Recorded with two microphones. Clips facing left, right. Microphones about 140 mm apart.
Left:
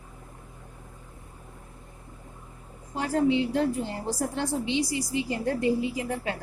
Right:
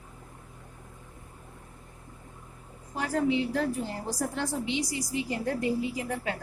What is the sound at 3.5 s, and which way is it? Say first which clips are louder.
A woman's voice: left 3 dB; 25° left (ahead or behind).